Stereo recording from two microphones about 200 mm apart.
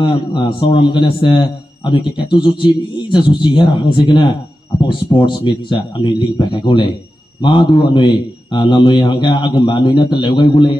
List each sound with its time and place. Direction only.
0.0 s a man's voice: 25° left (ahead or behind)